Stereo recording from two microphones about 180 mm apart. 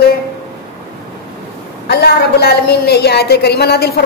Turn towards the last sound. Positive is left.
turn(degrees=65)  # may be behind; listen again after turning